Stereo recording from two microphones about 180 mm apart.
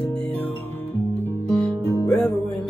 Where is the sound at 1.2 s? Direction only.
5° left (ahead or behind).